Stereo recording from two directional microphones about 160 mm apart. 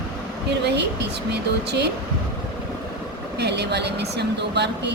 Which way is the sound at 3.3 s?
90° right.